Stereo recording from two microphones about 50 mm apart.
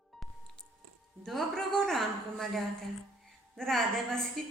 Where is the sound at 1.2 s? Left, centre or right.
Centre.